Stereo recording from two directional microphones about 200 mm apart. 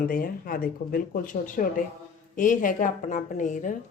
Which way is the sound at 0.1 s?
45° left (ahead or behind).